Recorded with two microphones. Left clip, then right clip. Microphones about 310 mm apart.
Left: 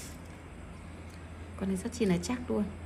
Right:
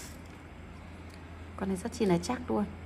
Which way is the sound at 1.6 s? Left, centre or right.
Right.